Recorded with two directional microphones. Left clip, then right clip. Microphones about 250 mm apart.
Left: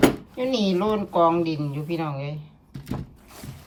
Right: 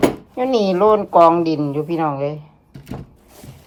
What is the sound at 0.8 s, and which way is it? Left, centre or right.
Speech, left.